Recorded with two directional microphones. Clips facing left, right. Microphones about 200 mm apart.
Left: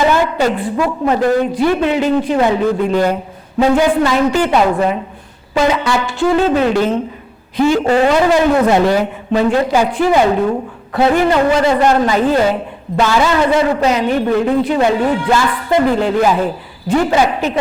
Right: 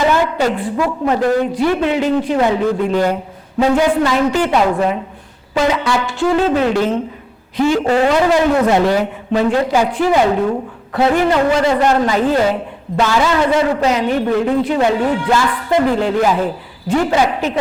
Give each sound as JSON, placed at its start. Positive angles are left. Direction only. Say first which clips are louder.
{"t": 0.0, "sound": "a woman's voice", "louder": "left 1 dB", "side_deg": 15}